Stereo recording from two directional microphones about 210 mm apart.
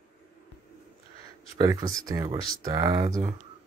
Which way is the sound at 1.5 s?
15° right (ahead or behind).